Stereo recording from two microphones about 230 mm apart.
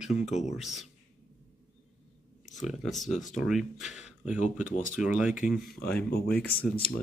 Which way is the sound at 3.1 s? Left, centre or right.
Left.